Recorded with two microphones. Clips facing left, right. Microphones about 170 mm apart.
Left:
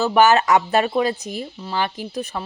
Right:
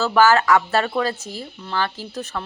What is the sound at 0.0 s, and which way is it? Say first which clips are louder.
A woman's voice: left 1 dB; 20° left (ahead or behind).